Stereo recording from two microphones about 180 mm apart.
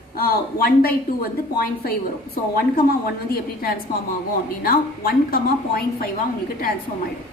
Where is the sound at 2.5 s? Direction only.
55° left (ahead or behind).